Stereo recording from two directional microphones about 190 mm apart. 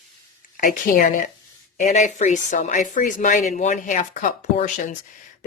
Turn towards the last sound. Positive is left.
turn(degrees=40)  # may be behind; listen again after turning